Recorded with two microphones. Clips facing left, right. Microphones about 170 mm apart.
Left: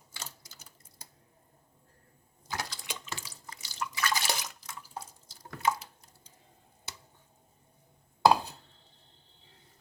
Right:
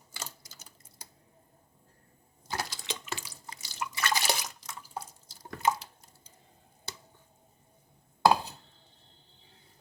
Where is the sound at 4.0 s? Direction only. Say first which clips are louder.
Right 1 dB; 20° right (ahead or behind).